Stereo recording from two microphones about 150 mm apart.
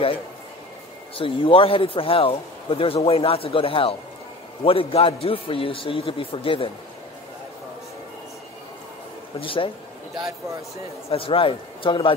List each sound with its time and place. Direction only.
1.1 s speech: 35° left (ahead or behind)
9.4 s speech: 35° left (ahead or behind)
11.1 s speech: 40° left (ahead or behind)